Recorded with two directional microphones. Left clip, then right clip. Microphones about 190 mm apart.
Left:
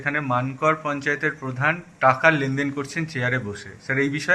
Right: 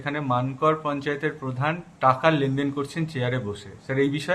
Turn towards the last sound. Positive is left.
turn(degrees=0)  # may be behind; listen again after turning